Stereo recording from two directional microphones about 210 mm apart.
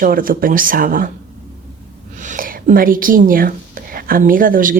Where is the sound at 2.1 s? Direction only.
35° right (ahead or behind).